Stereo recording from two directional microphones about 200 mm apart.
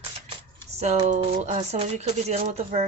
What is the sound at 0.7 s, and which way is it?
Speech, 30° right (ahead or behind).